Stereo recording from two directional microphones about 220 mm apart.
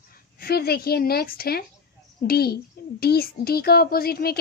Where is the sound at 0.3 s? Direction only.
45° left (ahead or behind).